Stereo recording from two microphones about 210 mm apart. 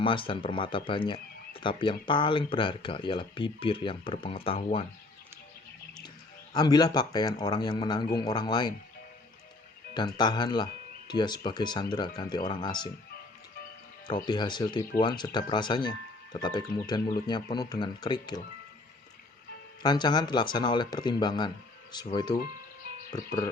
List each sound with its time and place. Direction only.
0.0 s speech: 25° left (ahead or behind)
6.5 s speech: 20° left (ahead or behind)
10.2 s speech: 20° left (ahead or behind)
14.3 s speech: 20° left (ahead or behind)
19.8 s speech: 20° left (ahead or behind)